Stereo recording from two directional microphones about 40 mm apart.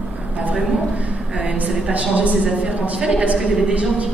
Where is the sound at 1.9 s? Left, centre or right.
Right.